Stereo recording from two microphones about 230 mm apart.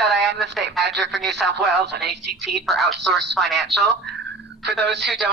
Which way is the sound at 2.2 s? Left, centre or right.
Right.